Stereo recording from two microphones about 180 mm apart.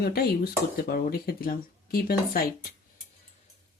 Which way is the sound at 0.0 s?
60° left (ahead or behind).